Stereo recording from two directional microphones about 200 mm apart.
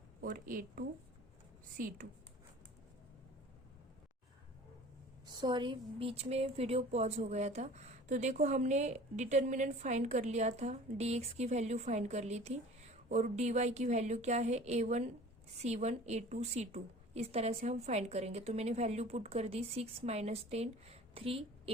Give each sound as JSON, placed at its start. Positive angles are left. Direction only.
{"t": 0.2, "sound": "speech", "side_deg": -45}
{"t": 5.4, "sound": "a woman's voice", "side_deg": -20}